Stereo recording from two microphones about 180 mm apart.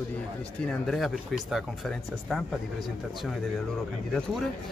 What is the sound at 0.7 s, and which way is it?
Speech, centre (ahead or behind).